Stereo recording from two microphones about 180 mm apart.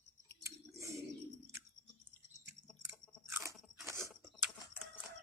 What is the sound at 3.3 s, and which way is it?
Crunch, 15° right (ahead or behind).